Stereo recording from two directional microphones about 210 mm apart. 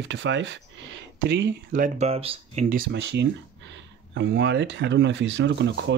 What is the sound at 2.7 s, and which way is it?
Speech, 50° right (ahead or behind).